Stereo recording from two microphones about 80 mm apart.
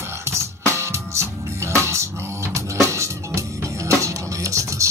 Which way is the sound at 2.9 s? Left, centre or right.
Right.